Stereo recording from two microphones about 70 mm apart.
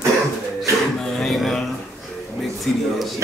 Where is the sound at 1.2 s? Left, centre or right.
Centre.